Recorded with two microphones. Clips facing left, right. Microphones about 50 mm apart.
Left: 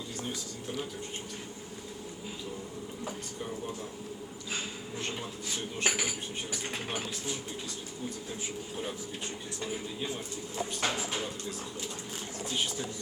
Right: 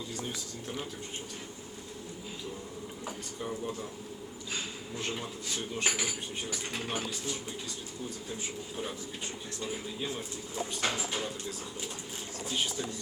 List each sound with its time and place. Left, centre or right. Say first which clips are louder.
5.7 s dishes: left 1 dB; centre
6.5 s speech: right 1 dB; centre
9.6 s speech: even; centre